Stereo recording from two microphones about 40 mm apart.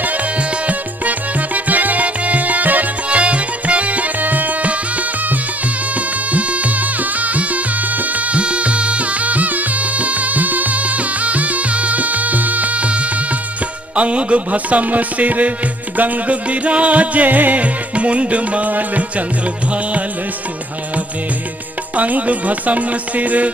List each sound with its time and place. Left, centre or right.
0.0 s music: right
3.1 s music: right
21.9 s music: right